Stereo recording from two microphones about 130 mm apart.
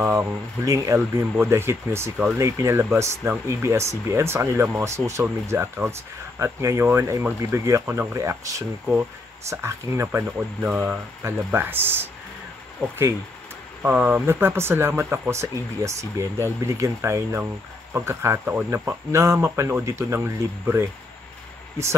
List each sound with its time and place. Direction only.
0.0 s speech: 15° right (ahead or behind)
13.8 s speech: 10° right (ahead or behind)